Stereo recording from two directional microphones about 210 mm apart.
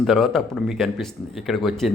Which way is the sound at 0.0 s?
Centre (ahead or behind).